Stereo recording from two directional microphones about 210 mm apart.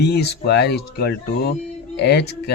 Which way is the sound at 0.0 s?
50° left (ahead or behind).